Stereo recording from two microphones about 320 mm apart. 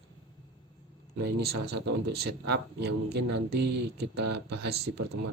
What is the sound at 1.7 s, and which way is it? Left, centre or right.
Speech, right.